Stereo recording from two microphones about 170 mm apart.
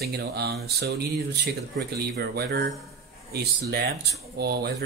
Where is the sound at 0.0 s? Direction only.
70° right (ahead or behind).